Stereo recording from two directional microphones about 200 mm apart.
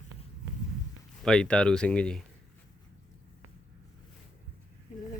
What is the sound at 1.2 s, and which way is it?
Speech, 5° left (ahead or behind).